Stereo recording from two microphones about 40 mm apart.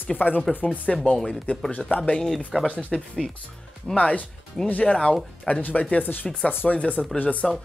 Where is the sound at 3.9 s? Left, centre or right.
Left.